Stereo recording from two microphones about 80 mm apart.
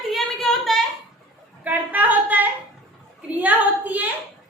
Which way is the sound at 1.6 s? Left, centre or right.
Right.